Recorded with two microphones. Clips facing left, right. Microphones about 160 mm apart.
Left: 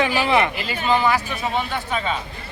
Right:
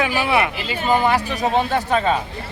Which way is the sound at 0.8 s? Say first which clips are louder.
Right 2 dB; 45° right (ahead or behind).